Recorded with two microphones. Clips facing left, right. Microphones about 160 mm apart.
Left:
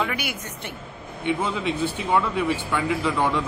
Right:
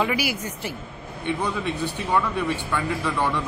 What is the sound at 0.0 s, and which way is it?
Speech, 5° right (ahead or behind).